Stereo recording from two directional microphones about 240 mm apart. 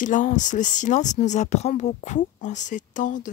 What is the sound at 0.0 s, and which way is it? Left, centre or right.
Speech, left.